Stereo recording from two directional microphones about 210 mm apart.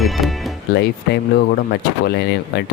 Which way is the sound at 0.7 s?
50° left (ahead or behind).